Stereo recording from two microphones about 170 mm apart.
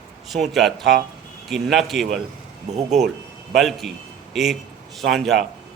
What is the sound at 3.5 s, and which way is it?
A man's voice, centre (ahead or behind).